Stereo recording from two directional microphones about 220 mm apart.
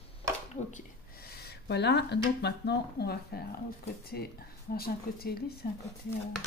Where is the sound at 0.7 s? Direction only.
40° left (ahead or behind).